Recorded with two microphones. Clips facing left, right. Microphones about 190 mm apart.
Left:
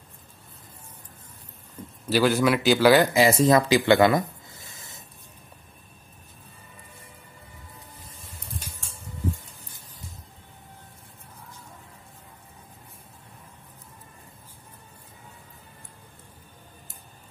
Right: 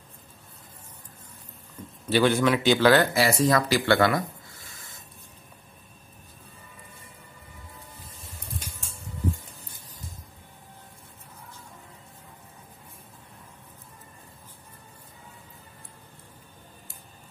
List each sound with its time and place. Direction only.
2.0 s speech: centre (ahead or behind); by 5.0 s 20° left (ahead or behind)